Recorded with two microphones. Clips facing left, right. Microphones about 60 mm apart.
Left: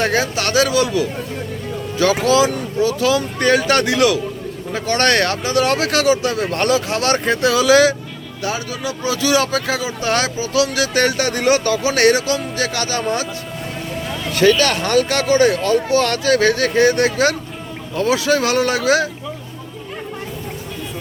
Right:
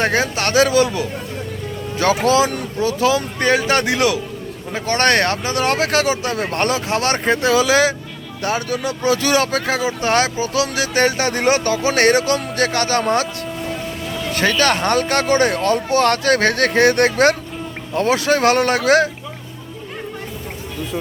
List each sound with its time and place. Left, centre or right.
0.0 s speech: right
8.4 s a man's voice: right
14.3 s speech: right